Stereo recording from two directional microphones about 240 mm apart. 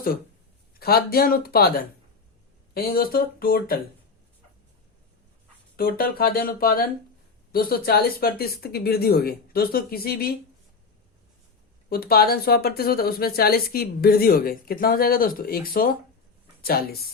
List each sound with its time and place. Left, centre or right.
0.8 s speech: left
5.7 s speech: left
11.9 s speech: left